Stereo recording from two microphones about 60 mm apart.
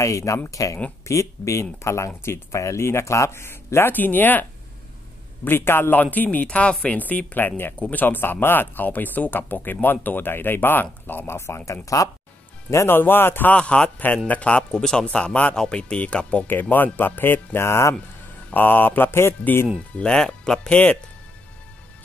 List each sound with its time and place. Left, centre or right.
0.0 s speech: left
1.0 s a man's voice: left
12.7 s speech: left
13.6 s a man's voice: centre
14.5 s speech: centre
16.4 s speech: left
18.5 s speech: left
20.0 s speech: centre
20.7 s a man's voice: left